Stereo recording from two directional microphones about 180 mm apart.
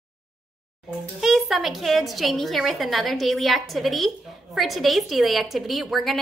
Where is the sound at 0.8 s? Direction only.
Centre (ahead or behind).